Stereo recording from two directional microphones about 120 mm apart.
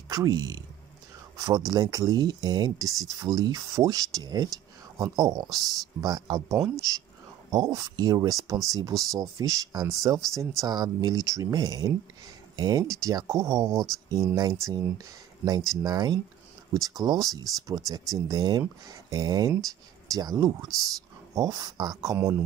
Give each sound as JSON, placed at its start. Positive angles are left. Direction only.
{"t": 0.1, "sound": "speech", "side_deg": -30}
{"t": 15.8, "sound": "speech", "side_deg": -35}